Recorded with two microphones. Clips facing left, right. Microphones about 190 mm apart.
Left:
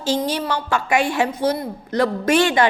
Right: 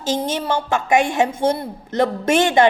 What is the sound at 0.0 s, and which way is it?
A woman's voice, 20° right (ahead or behind).